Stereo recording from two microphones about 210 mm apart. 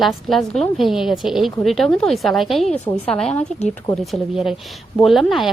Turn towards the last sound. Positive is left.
turn(degrees=0)  # may be behind; listen again after turning